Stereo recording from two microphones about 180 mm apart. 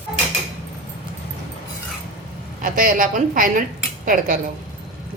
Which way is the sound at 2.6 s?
50° right (ahead or behind).